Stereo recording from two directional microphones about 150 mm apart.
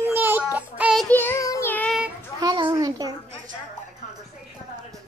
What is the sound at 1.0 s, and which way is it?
Child singing, 15° left (ahead or behind).